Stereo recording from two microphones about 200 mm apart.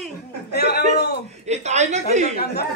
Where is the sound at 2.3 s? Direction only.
55° left (ahead or behind).